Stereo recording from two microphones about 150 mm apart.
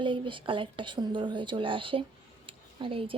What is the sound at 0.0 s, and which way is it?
Speech, 35° right (ahead or behind).